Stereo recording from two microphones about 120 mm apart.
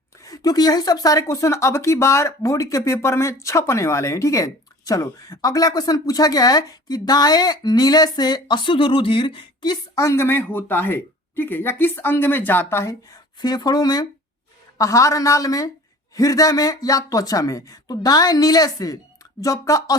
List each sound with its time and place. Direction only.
0.3 s speech: 30° left (ahead or behind)
9.9 s speech: 25° left (ahead or behind)
13.4 s speech: 35° left (ahead or behind)